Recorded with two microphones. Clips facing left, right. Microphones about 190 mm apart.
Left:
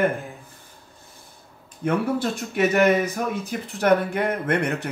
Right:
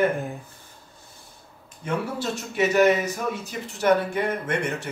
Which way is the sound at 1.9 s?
55° left (ahead or behind).